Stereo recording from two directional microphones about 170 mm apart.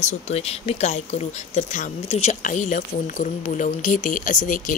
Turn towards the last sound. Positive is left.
turn(degrees=55)  # may be behind; listen again after turning